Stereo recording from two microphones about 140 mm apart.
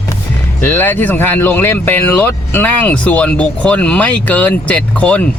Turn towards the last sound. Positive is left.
turn(degrees=10)  # may be behind; listen again after turning